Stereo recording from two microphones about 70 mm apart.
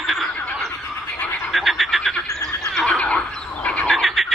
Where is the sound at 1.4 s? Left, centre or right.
Centre.